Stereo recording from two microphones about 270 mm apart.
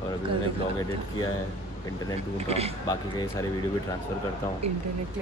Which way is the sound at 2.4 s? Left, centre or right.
Right.